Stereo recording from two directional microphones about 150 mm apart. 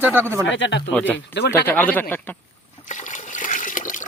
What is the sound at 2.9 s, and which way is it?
Water, 55° left (ahead or behind).